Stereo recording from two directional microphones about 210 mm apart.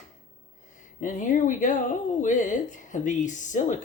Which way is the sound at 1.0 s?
40° left (ahead or behind).